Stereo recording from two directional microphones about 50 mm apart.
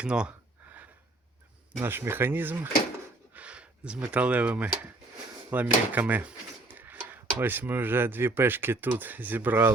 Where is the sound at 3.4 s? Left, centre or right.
Right.